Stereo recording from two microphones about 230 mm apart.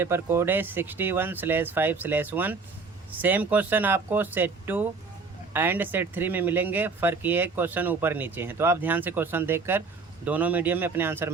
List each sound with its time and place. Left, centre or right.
0.0 s speech: centre